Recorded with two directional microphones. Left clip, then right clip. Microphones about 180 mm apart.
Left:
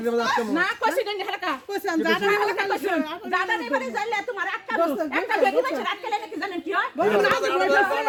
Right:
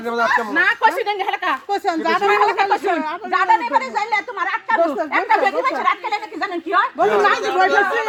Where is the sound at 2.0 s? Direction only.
35° left (ahead or behind).